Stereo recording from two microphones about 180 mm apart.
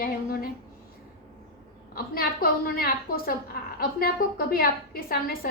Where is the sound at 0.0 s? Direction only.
55° left (ahead or behind).